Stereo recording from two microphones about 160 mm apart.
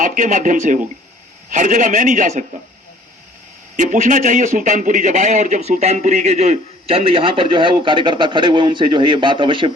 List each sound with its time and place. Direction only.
0.0 s a man's voice: 55° right (ahead or behind)
3.8 s a man's voice: 55° right (ahead or behind); by 9.7 s 30° right (ahead or behind)